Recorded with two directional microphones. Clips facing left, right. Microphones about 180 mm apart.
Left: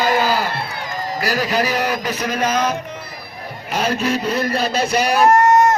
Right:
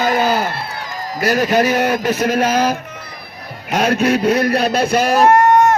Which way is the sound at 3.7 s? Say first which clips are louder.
Right 5 dB; 70° right (ahead or behind).